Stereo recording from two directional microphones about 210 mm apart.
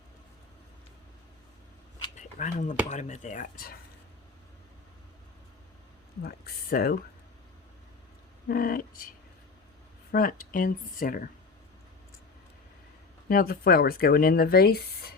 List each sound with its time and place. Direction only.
2.1 s a sound: 35° left (ahead or behind)
2.9 s speech: 35° left (ahead or behind)
6.2 s speech: 45° left (ahead or behind)
8.4 s speech: 45° left (ahead or behind)
10.1 s speech: 45° left (ahead or behind)
13.2 s speech: 45° left (ahead or behind)